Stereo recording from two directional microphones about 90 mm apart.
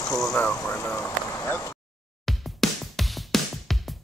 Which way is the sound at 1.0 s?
25° left (ahead or behind).